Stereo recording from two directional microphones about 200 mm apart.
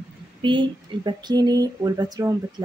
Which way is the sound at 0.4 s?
25° right (ahead or behind).